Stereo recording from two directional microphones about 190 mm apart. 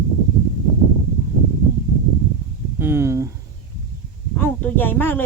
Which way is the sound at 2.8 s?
10° right (ahead or behind).